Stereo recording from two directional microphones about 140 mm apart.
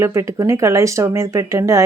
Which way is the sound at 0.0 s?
20° right (ahead or behind).